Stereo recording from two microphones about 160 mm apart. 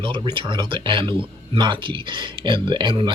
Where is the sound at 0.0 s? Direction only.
30° right (ahead or behind).